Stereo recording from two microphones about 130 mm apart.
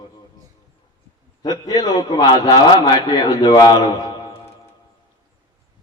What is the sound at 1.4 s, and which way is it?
A man's voice, 30° left (ahead or behind).